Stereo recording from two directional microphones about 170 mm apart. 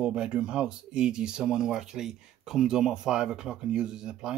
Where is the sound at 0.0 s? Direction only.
5° right (ahead or behind).